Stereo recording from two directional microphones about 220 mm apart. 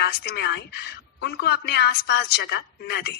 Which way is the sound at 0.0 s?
50° left (ahead or behind).